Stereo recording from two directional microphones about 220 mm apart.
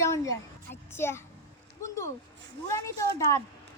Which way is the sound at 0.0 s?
10° left (ahead or behind).